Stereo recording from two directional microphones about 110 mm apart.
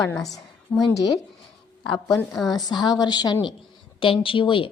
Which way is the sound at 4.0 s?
50° left (ahead or behind).